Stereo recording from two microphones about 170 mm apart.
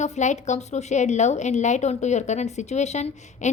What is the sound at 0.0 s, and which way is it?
A woman's voice, 45° left (ahead or behind).